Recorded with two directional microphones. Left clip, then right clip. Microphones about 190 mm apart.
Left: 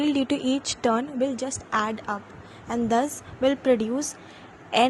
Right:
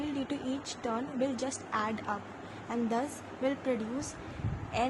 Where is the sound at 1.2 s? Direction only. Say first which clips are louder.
Left 6 dB; 25° left (ahead or behind).